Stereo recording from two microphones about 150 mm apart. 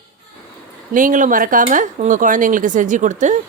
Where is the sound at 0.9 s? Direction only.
60° right (ahead or behind).